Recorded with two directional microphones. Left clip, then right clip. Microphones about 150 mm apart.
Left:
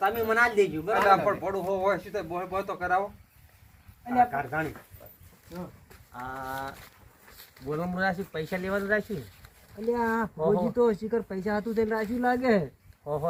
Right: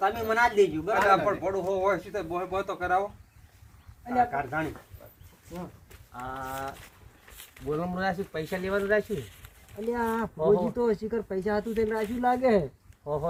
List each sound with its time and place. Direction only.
0.0 s speech: 15° right (ahead or behind)
4.2 s speech: 10° right (ahead or behind)
6.1 s speech: centre (ahead or behind)
6.4 s speech: 10° left (ahead or behind)
7.7 s speech: 5° right (ahead or behind)
9.9 s speech: 15° right (ahead or behind)